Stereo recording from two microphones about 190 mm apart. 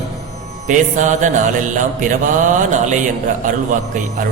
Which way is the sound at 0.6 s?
40° right (ahead or behind).